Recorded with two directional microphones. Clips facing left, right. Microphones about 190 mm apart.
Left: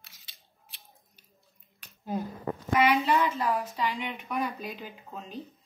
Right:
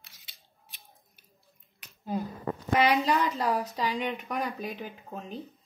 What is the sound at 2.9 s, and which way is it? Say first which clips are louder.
A woman's voice: even; 40° right (ahead or behind).